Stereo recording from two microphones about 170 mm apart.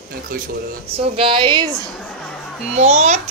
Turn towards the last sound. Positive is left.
turn(degrees=-45)  # may be behind; listen again after turning